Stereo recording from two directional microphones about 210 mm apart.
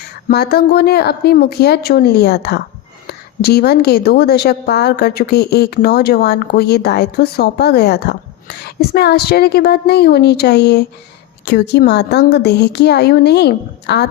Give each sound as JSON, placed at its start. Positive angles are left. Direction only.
{"t": 0.3, "sound": "a woman's voice", "side_deg": 45}